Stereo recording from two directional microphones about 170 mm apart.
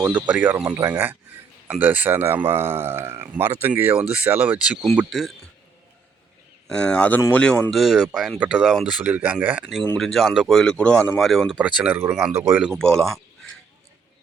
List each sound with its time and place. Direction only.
0.1 s speech: 10° right (ahead or behind)
6.7 s speech: 5° left (ahead or behind)
7.7 s speech: centre (ahead or behind)
11.6 s speech: 10° right (ahead or behind)